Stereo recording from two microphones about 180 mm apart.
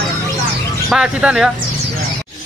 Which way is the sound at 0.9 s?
5° right (ahead or behind).